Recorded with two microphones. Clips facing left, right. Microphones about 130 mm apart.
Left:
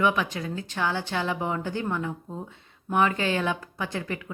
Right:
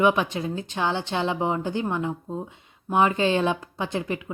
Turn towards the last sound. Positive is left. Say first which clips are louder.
# right 4 dB
turn(degrees=-20)  # may be behind; listen again after turning